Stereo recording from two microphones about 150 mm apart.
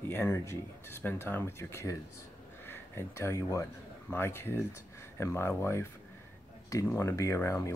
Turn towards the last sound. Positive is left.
turn(degrees=20)  # may be behind; listen again after turning